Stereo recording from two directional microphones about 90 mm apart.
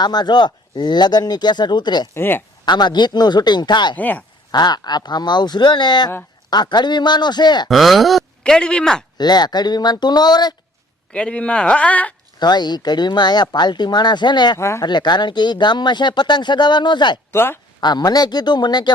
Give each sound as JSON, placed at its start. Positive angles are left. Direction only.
{"t": 0.0, "sound": "speech", "side_deg": 50}
{"t": 2.1, "sound": "speech", "side_deg": 25}
{"t": 2.6, "sound": "speech", "side_deg": 55}
{"t": 3.9, "sound": "speech", "side_deg": 20}
{"t": 4.5, "sound": "speech", "side_deg": 50}
{"t": 7.7, "sound": "speech", "side_deg": 0}
{"t": 9.1, "sound": "speech", "side_deg": 50}
{"t": 11.1, "sound": "speech", "side_deg": 10}
{"t": 12.4, "sound": "speech", "side_deg": 50}
{"t": 17.3, "sound": "speech", "side_deg": 25}
{"t": 17.7, "sound": "speech", "side_deg": 50}